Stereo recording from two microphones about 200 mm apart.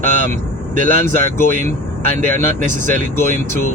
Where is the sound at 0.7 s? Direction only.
40° right (ahead or behind).